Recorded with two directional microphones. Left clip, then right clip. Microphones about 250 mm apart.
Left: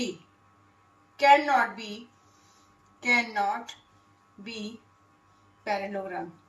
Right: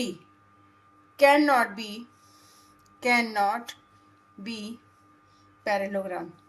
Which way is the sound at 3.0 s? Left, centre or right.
Right.